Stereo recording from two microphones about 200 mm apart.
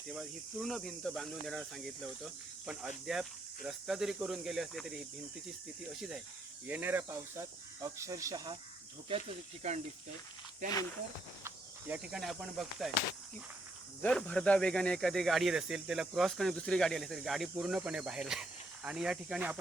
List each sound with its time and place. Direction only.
0.1 s speech: centre (ahead or behind); by 8.5 s 15° right (ahead or behind)
9.6 s speech: 35° right (ahead or behind)
11.4 s insect: 5° right (ahead or behind)
14.0 s speech: 5° left (ahead or behind)